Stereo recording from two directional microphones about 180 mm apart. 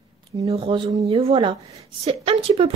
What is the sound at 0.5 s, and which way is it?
A woman's voice, 30° right (ahead or behind).